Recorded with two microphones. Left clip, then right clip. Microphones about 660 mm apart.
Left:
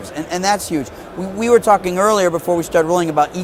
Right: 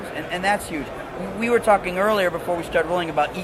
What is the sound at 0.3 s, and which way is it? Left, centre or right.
A man's voice, left.